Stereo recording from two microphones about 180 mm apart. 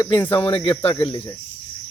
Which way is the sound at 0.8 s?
35° left (ahead or behind).